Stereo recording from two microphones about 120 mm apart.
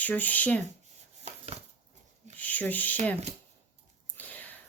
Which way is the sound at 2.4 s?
15° left (ahead or behind).